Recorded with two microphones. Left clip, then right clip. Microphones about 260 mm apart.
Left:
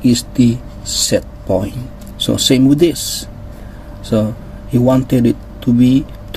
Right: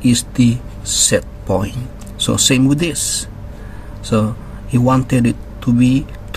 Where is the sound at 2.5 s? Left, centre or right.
Right.